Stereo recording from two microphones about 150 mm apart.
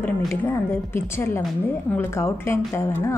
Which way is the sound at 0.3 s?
15° left (ahead or behind).